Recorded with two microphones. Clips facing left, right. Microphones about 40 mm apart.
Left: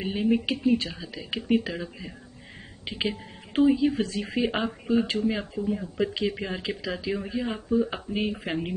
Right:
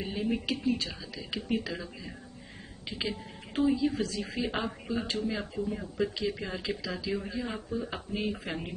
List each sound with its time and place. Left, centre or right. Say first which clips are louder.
0.0 s a woman's voice: left 7 dB; left
5.5 s speech: left 5 dB; centre
5.9 s speech: left 2 dB; left